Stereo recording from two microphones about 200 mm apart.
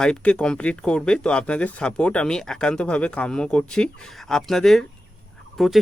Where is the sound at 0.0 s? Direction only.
5° left (ahead or behind).